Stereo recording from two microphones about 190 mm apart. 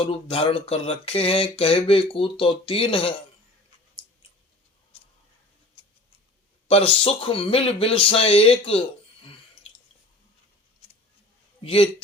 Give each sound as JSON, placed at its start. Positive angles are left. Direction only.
{"t": 0.0, "sound": "speech", "side_deg": 30}
{"t": 6.7, "sound": "speech", "side_deg": 30}
{"t": 11.6, "sound": "a man's voice", "side_deg": 30}